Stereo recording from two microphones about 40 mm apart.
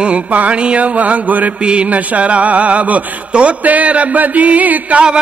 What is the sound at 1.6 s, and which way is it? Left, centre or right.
A man's voice, right.